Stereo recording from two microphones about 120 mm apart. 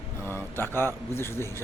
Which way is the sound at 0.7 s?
20° left (ahead or behind).